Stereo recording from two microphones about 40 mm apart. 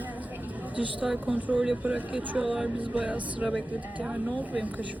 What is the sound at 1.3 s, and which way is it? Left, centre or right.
Speech, right.